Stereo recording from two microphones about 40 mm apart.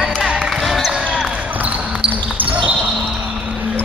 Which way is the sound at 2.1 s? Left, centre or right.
Right.